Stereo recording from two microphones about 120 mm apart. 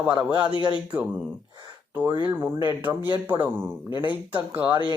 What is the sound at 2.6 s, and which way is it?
A man's voice, 20° right (ahead or behind).